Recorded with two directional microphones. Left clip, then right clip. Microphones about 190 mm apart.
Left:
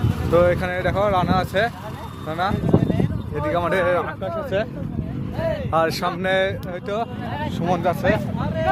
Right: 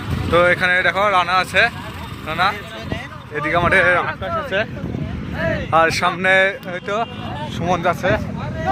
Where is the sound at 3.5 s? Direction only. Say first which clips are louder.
Right 5 dB; 10° right (ahead or behind).